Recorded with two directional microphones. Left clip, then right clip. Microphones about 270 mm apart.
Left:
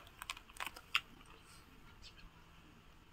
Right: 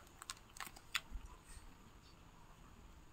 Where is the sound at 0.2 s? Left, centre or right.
Centre.